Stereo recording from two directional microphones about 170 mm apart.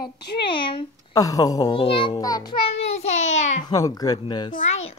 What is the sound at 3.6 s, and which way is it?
Child singing, 20° left (ahead or behind).